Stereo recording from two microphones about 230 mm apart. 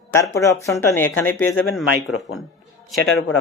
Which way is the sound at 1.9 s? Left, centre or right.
Left.